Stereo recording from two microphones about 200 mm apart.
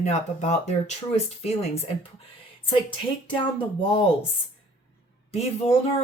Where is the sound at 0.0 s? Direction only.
35° left (ahead or behind).